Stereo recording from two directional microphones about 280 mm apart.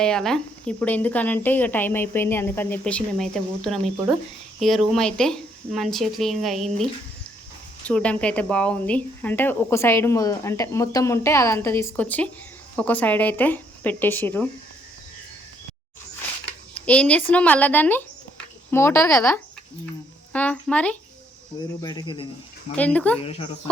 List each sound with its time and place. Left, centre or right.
0.0 s a woman's voice: centre
7.9 s a woman's voice: centre
16.7 s speech: centre
20.3 s a sound: centre
21.8 s speech: centre
22.8 s a woman's voice: centre
23.2 s speech: left